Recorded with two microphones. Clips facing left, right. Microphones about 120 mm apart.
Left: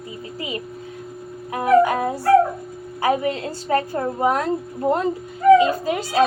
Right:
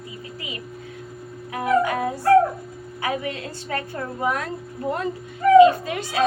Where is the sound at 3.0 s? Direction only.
30° left (ahead or behind).